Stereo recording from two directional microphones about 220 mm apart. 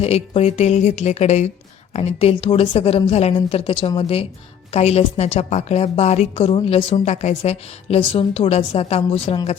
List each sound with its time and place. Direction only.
0.0 s a woman's voice: 30° left (ahead or behind)